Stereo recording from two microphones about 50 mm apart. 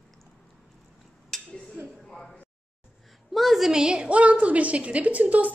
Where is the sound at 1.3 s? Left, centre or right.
Centre.